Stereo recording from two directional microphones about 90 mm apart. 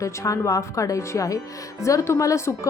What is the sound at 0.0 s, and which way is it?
A woman's voice, 35° left (ahead or behind).